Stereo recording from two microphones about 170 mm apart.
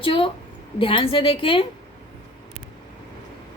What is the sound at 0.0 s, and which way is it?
A woman's voice, 30° left (ahead or behind).